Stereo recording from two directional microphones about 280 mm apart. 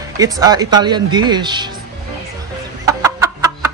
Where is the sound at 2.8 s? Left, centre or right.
Centre.